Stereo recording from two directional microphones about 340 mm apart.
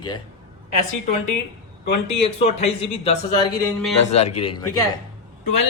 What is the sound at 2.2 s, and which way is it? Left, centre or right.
Speech, centre.